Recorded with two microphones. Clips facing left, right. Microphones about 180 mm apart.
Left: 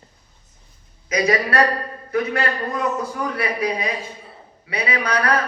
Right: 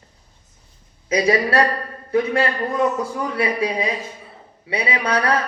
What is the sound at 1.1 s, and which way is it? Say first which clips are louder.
A man's voice: right 2 dB; 30° right (ahead or behind).